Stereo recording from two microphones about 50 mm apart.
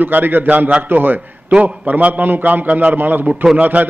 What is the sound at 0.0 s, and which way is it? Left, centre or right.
Speech, right.